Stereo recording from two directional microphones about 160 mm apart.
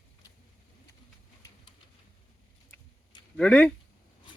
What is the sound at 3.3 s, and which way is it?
Speech, 5° left (ahead or behind).